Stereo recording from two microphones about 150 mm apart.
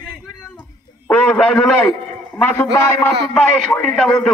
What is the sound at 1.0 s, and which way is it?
A man's voice, 5° left (ahead or behind).